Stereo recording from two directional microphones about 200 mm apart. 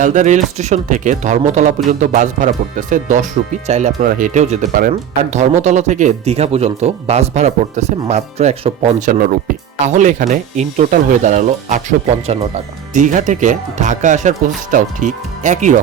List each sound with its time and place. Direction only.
0.0 s speech: 35° right (ahead or behind)